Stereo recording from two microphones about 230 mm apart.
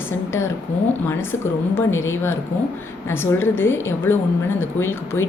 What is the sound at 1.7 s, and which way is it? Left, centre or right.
A woman's voice, centre.